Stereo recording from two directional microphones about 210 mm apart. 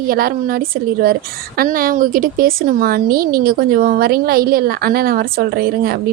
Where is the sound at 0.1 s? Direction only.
45° right (ahead or behind).